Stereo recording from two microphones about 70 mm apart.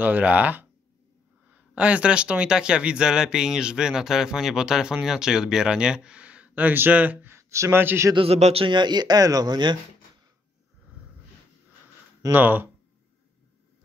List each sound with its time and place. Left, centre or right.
0.0 s speech: right
7.2 s speech: right
7.8 s speech: right
8.7 s speech: right
12.3 s speech: right